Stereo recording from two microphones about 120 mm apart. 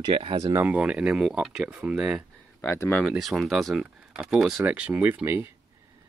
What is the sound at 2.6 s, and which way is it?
Speech, 20° left (ahead or behind).